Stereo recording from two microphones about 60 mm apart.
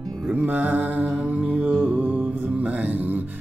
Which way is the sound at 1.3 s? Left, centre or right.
Right.